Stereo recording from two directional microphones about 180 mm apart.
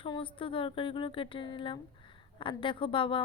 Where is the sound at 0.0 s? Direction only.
30° left (ahead or behind).